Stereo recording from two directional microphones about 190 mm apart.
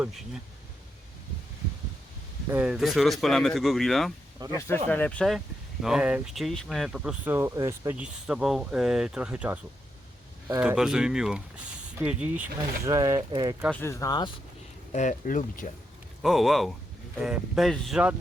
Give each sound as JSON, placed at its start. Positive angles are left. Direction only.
{"t": 2.5, "sound": "speech", "side_deg": -5}
{"t": 4.4, "sound": "speech", "side_deg": -20}
{"t": 4.9, "sound": "speech", "side_deg": 10}
{"t": 10.6, "sound": "speech", "side_deg": -5}
{"t": 12.8, "sound": "speech", "side_deg": -15}
{"t": 13.7, "sound": "speech", "side_deg": 15}
{"t": 14.9, "sound": "speech", "side_deg": 40}
{"t": 16.2, "sound": "speech", "side_deg": 0}